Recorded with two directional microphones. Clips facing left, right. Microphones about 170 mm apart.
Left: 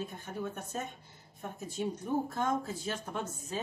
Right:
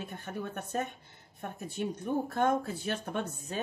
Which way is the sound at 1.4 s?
60° right (ahead or behind).